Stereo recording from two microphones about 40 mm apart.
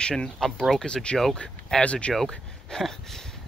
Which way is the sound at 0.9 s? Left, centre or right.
Left.